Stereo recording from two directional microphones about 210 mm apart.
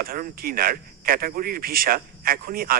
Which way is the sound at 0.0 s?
45° right (ahead or behind).